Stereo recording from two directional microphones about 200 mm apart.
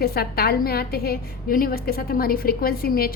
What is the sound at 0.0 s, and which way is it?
A woman's voice, 50° left (ahead or behind).